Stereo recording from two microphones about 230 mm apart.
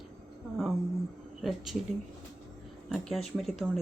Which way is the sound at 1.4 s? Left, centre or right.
Centre.